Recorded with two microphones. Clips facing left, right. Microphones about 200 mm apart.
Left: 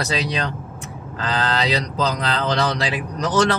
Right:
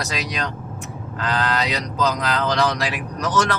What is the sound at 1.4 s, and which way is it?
Speech, 30° left (ahead or behind).